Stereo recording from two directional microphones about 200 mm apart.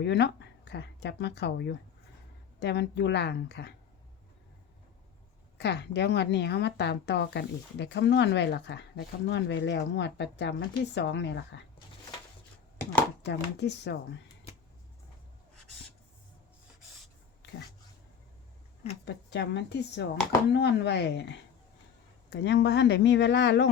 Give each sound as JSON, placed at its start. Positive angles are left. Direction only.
{"t": 0.0, "sound": "speech", "side_deg": 60}
{"t": 5.5, "sound": "speech", "side_deg": 60}
{"t": 13.2, "sound": "speech", "side_deg": 60}
{"t": 19.0, "sound": "speech", "side_deg": 60}